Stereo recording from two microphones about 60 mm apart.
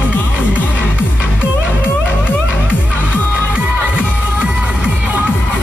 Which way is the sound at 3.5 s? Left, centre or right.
Centre.